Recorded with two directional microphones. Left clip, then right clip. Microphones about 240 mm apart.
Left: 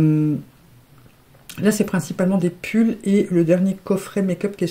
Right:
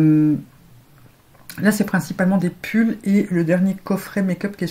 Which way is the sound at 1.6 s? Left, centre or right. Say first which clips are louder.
Even; left.